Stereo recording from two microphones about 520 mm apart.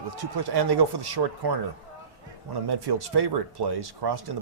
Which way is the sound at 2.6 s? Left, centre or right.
Right.